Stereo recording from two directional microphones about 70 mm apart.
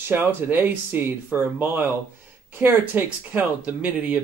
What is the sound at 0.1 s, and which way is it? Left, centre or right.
Speech, right.